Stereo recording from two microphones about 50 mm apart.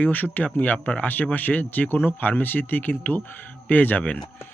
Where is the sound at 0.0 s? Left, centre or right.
Left.